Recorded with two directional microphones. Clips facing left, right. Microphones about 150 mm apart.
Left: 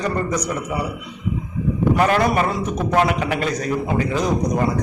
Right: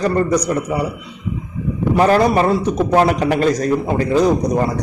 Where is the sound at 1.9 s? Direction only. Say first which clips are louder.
Right 7 dB; 30° right (ahead or behind).